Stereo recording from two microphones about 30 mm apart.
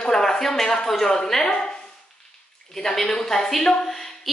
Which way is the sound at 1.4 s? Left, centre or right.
Left.